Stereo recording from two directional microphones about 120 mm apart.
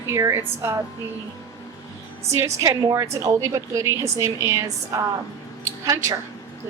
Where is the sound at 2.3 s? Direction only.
25° right (ahead or behind).